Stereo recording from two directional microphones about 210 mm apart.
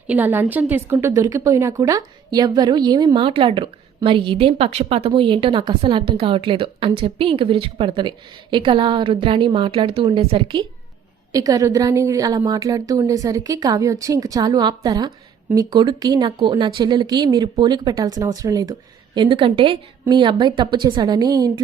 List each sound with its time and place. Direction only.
0.1 s a woman's voice: 10° right (ahead or behind)